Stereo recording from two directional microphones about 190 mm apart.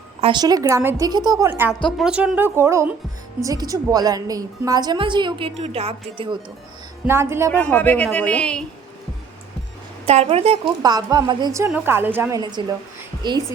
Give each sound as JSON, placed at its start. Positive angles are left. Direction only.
{"t": 0.2, "sound": "a woman's voice", "side_deg": -25}
{"t": 7.1, "sound": "speech", "side_deg": -15}
{"t": 7.7, "sound": "speech", "side_deg": 10}
{"t": 10.1, "sound": "a woman's voice", "side_deg": -35}
{"t": 10.8, "sound": "a woman's voice", "side_deg": -20}
{"t": 12.4, "sound": "a woman's voice", "side_deg": -20}